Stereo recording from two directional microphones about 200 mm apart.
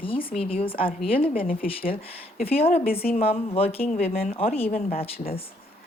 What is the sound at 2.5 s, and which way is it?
Speech, 30° left (ahead or behind).